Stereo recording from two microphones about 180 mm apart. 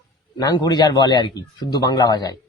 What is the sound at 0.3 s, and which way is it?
A man's voice, 25° left (ahead or behind).